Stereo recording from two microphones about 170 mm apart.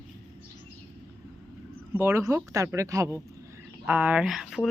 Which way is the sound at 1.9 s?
15° right (ahead or behind).